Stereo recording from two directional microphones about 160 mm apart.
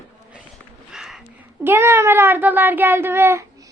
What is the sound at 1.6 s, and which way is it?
A child's voice, 15° right (ahead or behind).